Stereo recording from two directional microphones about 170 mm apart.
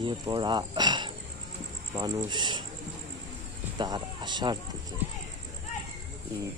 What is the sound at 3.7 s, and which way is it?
Speech, 25° right (ahead or behind).